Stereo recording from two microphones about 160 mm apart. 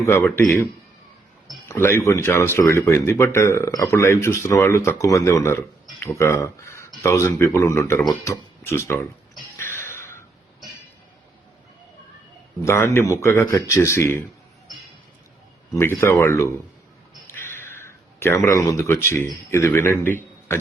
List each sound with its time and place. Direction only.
0.0 s speech: 15° left (ahead or behind)
9.6 s a sound: 15° left (ahead or behind)
12.6 s speech: 15° left (ahead or behind)
15.7 s speech: 15° left (ahead or behind)
17.3 s a sound: 15° left (ahead or behind)
19.5 s a man's voice: 15° left (ahead or behind)